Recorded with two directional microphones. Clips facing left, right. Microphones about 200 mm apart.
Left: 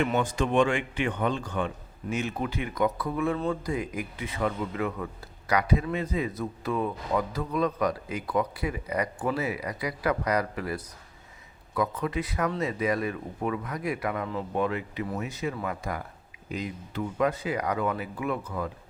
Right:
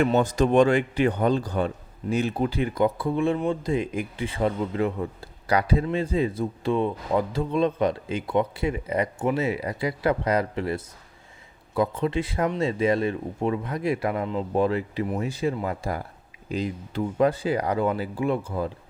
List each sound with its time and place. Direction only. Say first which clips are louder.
0.2 s a man's voice: right 5 dB; 40° right (ahead or behind)